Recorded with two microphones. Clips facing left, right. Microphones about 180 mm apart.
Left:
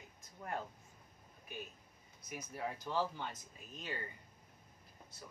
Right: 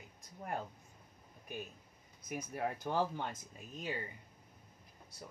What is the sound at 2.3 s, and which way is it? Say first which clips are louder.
Speech: right 4 dB; 55° right (ahead or behind).